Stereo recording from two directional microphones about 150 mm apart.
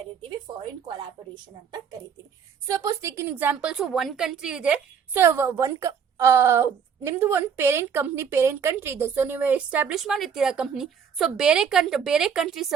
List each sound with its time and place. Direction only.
0.2 s speech: 30° right (ahead or behind)
2.6 s a woman's voice: 20° right (ahead or behind); by 12.7 s centre (ahead or behind)